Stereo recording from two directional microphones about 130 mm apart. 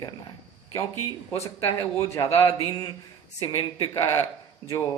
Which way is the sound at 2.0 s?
30° left (ahead or behind).